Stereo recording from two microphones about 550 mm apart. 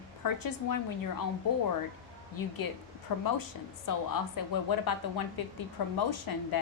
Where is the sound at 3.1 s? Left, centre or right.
Left.